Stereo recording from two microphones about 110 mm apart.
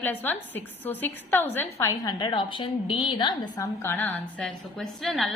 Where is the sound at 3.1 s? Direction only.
45° left (ahead or behind).